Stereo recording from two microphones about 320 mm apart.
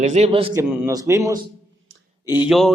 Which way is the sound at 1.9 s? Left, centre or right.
Right.